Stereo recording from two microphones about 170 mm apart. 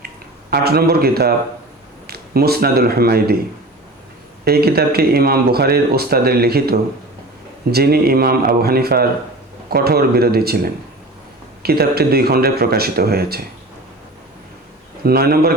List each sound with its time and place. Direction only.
0.5 s a man's voice: 65° right (ahead or behind)
4.4 s speech: 65° right (ahead or behind)
15.0 s speech: 65° right (ahead or behind)